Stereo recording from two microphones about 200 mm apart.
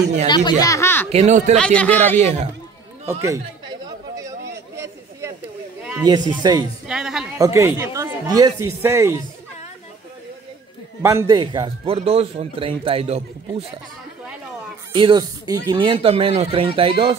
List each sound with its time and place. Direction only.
0.3 s speech: 20° left (ahead or behind)
1.1 s speech: 35° right (ahead or behind)
1.6 s speech: 5° left (ahead or behind)
2.1 s speech: 30° right (ahead or behind)
3.1 s chatter: 15° right (ahead or behind)
6.0 s a man's voice: 20° right (ahead or behind)
6.9 s speech: 5° right (ahead or behind)
7.3 s speech: 15° right (ahead or behind)
11.0 s a man's voice: 15° right (ahead or behind); by 13.7 s 30° right (ahead or behind)
15.0 s a man's voice: 25° right (ahead or behind)